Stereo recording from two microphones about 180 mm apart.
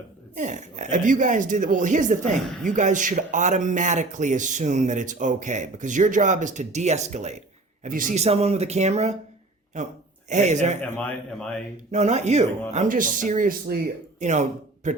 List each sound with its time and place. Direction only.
0.3 s speech: 45° right (ahead or behind)
10.8 s a man's voice: 10° left (ahead or behind)
11.9 s speech: 40° right (ahead or behind)